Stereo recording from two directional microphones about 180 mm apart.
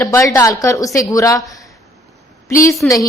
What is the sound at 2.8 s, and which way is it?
Speech, 5° left (ahead or behind).